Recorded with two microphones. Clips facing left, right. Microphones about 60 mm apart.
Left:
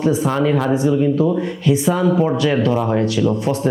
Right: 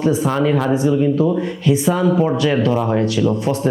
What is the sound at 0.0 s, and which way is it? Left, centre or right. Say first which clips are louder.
Speech: even; right.